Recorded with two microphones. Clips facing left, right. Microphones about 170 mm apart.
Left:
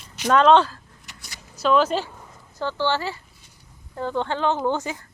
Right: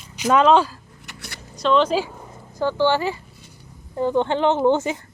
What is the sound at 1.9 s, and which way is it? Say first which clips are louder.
Speech: right 3 dB; 10° right (ahead or behind).